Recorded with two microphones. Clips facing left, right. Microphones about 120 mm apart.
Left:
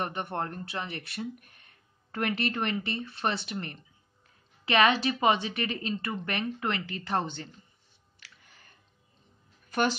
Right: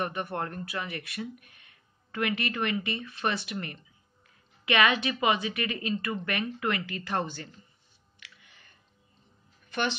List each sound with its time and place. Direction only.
0.0 s speech: 30° left (ahead or behind)
8.2 s clicking: 40° left (ahead or behind)
9.7 s a sound: 40° left (ahead or behind)